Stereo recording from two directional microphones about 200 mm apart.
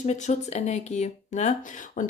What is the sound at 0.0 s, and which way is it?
Speech, 35° left (ahead or behind).